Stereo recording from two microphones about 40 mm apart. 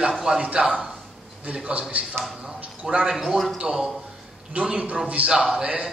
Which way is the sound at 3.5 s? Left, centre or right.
Centre.